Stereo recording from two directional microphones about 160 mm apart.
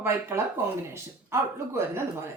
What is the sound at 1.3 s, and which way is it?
Speech, 15° right (ahead or behind).